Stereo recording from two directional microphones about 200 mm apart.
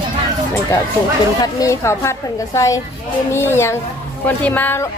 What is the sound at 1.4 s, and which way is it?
Speech, 15° left (ahead or behind).